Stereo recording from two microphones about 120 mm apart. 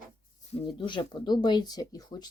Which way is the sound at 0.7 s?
40° left (ahead or behind).